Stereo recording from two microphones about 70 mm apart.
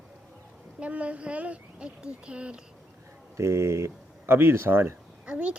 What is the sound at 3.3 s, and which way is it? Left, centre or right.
Speech, right.